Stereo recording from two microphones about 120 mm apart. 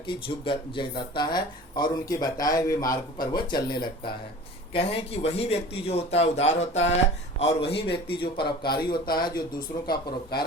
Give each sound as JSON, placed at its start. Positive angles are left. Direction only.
{"t": 0.1, "sound": "speech", "side_deg": 45}
{"t": 4.7, "sound": "speech", "side_deg": 55}
{"t": 7.3, "sound": "a man's voice", "side_deg": 50}